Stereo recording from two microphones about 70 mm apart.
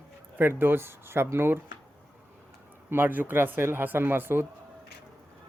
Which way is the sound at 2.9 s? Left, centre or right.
Right.